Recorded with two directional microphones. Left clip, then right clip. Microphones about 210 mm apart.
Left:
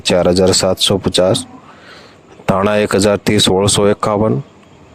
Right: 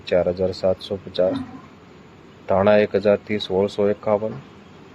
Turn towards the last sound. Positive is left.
turn(degrees=55)  # may be behind; listen again after turning